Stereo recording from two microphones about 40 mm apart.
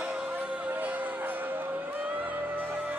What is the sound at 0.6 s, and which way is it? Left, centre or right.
Music, right.